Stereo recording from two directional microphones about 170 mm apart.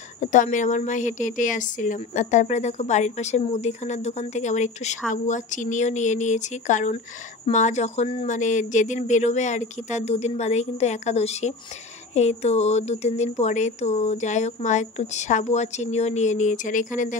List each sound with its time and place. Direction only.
0.2 s a woman's voice: 45° left (ahead or behind)